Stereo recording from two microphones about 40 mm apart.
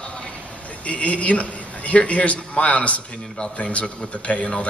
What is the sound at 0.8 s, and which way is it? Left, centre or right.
A man's voice, left.